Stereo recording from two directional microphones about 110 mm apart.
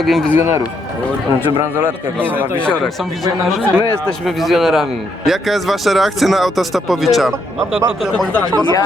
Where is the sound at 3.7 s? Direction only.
10° left (ahead or behind).